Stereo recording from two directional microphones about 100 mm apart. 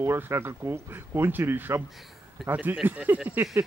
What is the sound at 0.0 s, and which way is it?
Speech, 25° right (ahead or behind).